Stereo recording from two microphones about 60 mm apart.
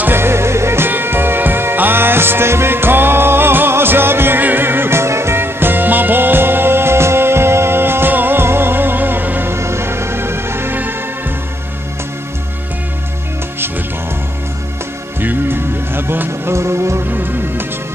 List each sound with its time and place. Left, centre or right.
0.0 s music: right
9.5 s music: right
15.1 s music: right
17.1 s music: right